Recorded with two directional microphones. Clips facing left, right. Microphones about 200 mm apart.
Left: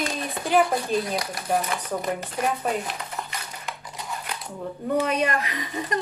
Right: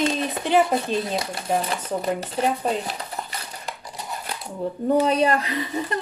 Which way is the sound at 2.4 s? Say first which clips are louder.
Right 2 dB; 30° right (ahead or behind).